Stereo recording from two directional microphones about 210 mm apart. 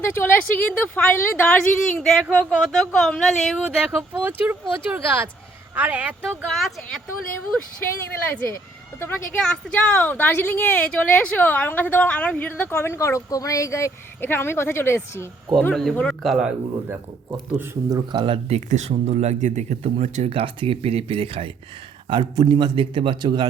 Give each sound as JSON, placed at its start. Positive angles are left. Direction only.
{"t": 0.0, "sound": "a woman's voice", "side_deg": 10}
{"t": 8.3, "sound": "speech", "side_deg": 10}